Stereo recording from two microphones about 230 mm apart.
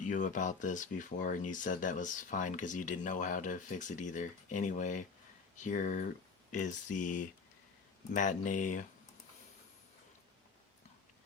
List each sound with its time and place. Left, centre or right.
0.0 s speech: left